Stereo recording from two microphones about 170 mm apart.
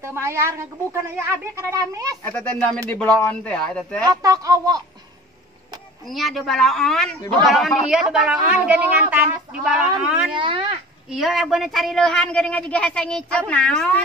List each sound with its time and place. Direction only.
0.0 s speech: 15° right (ahead or behind)
2.2 s a man's voice: 10° left (ahead or behind)
4.0 s speech: 20° right (ahead or behind)
6.0 s a man's voice: centre (ahead or behind)
10.3 s speech: 30° right (ahead or behind)
11.1 s a man's voice: centre (ahead or behind)